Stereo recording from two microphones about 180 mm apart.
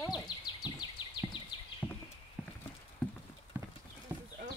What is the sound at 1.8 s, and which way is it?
Horse, 10° left (ahead or behind).